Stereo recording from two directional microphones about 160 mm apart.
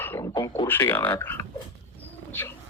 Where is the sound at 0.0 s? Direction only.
15° left (ahead or behind).